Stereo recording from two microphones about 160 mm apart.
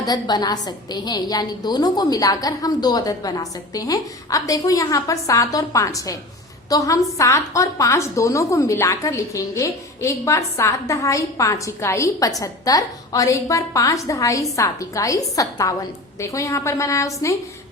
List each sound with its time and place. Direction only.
0.0 s a woman's voice: 25° left (ahead or behind)